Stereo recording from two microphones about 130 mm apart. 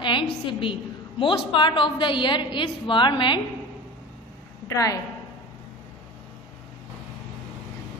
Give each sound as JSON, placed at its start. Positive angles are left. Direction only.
{"t": 0.0, "sound": "a woman's voice", "side_deg": 40}
{"t": 4.6, "sound": "a woman's voice", "side_deg": 25}